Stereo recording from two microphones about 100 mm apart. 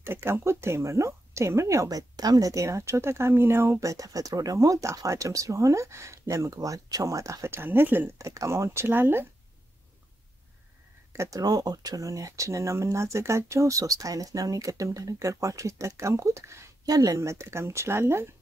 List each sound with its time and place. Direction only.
0.0 s speech: 25° right (ahead or behind)
8.3 s speech: 30° right (ahead or behind)
11.1 s speech: 35° right (ahead or behind)